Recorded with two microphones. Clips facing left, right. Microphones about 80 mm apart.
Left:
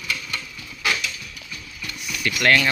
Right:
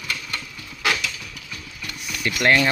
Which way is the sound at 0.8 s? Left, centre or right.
Right.